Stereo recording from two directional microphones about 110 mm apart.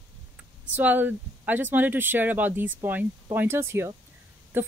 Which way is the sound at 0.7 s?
15° right (ahead or behind).